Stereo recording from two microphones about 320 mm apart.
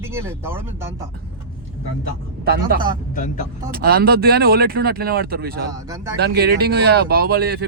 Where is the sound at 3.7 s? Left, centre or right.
Right.